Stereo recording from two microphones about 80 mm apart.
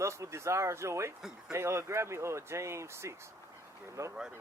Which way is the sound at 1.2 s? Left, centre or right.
Centre.